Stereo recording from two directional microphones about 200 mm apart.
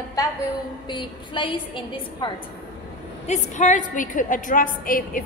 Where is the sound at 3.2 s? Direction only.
35° left (ahead or behind).